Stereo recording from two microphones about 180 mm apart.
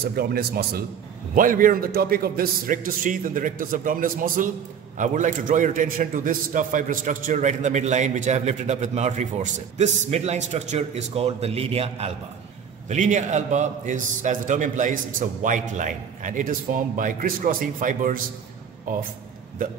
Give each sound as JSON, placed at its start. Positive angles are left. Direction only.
{"t": 0.1, "sound": "speech", "side_deg": -60}
{"t": 1.3, "sound": "a man's voice", "side_deg": -50}